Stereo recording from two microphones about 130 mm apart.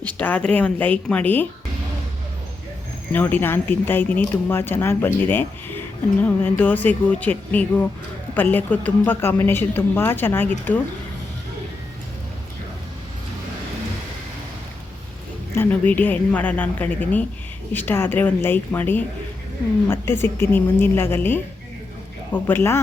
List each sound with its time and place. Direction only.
0.2 s speech: 10° left (ahead or behind)
3.1 s speech: 15° left (ahead or behind)
15.5 s speech: 10° left (ahead or behind)